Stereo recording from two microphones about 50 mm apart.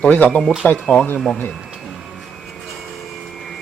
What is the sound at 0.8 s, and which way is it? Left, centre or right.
Speech, left.